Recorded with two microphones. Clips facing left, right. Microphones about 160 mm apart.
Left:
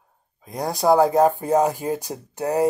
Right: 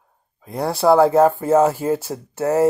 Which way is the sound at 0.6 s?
15° left (ahead or behind).